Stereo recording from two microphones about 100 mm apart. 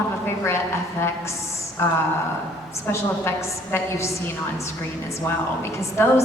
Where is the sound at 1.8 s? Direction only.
25° left (ahead or behind).